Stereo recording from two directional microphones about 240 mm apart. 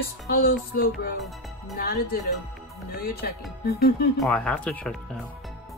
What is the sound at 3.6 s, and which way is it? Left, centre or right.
Speech, left.